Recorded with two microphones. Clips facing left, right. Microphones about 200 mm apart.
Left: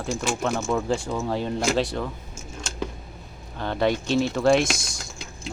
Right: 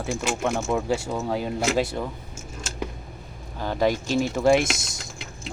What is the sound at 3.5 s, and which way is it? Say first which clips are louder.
Speech: right 1 dB; 10° right (ahead or behind).